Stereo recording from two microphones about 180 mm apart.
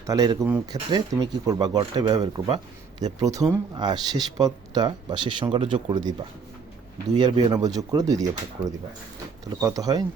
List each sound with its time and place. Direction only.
0.1 s speech: 20° right (ahead or behind)
7.2 s speech: 20° right (ahead or behind)